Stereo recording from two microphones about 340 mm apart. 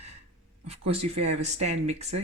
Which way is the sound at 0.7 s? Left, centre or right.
Centre.